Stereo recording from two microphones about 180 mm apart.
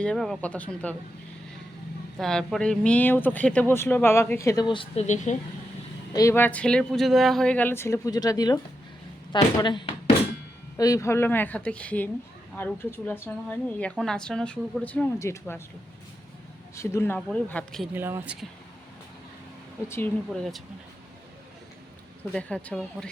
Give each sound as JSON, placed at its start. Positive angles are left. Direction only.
{"t": 0.0, "sound": "speech", "side_deg": 5}
{"t": 2.1, "sound": "speech", "side_deg": 0}
{"t": 5.0, "sound": "speech", "side_deg": 40}
{"t": 6.1, "sound": "a woman's voice", "side_deg": 15}
{"t": 16.7, "sound": "speech", "side_deg": 15}
{"t": 17.2, "sound": "a woman's voice", "side_deg": 5}
{"t": 17.9, "sound": "speech", "side_deg": -10}
{"t": 19.9, "sound": "a woman's voice", "side_deg": 5}
{"t": 22.3, "sound": "a woman's voice", "side_deg": 5}